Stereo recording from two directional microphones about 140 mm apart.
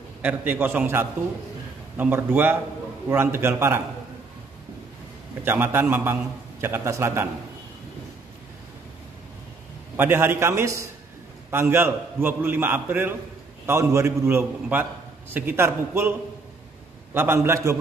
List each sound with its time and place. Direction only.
0.2 s a man's voice: 10° right (ahead or behind)
5.4 s a man's voice: 15° right (ahead or behind)
9.9 s a man's voice: 15° right (ahead or behind)